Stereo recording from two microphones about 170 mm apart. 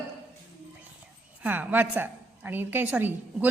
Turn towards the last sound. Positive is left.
turn(degrees=-10)  # may be behind; listen again after turning